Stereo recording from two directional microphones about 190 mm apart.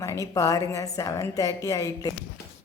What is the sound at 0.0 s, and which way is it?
A woman's voice, 15° left (ahead or behind).